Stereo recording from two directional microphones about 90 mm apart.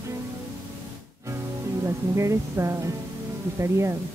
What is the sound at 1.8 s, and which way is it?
Speech, 35° right (ahead or behind).